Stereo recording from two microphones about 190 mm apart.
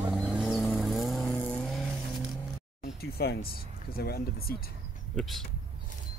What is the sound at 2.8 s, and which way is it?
Speech, 55° left (ahead or behind).